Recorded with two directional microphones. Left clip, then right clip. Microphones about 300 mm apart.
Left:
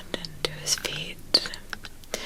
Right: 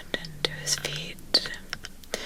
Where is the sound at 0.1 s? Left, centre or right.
Centre.